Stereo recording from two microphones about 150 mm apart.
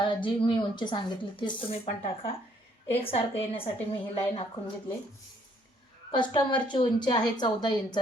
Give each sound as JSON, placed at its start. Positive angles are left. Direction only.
{"t": 0.0, "sound": "a woman's voice", "side_deg": 35}
{"t": 6.1, "sound": "a woman's voice", "side_deg": 30}